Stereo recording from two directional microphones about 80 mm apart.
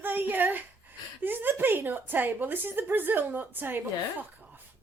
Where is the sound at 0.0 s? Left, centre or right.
Right.